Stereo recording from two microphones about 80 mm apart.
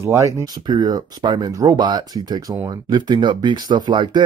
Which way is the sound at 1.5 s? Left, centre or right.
Right.